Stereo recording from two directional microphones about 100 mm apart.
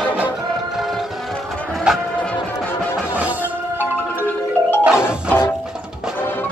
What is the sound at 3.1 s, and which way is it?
Music, 15° right (ahead or behind).